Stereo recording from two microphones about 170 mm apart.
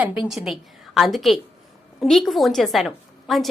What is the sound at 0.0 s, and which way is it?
A woman's voice, 5° right (ahead or behind).